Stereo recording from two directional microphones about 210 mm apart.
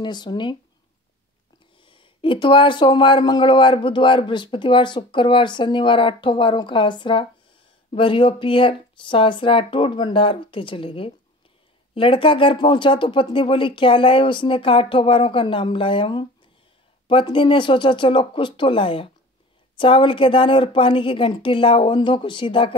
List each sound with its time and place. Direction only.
0.0 s speech: 20° left (ahead or behind)
1.8 s speech: 25° left (ahead or behind)